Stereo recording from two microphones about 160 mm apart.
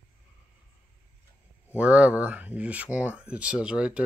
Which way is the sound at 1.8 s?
10° right (ahead or behind).